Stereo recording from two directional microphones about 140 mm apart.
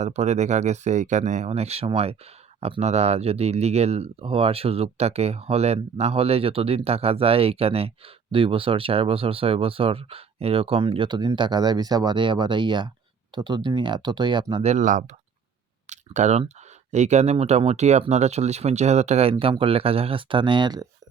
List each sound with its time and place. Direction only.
0.0 s speech: 50° right (ahead or behind); by 14.4 s 35° right (ahead or behind)
14.5 s speech: 50° right (ahead or behind)
15.9 s a sound: 55° right (ahead or behind)
16.9 s speech: 55° right (ahead or behind); by 20.8 s 30° right (ahead or behind)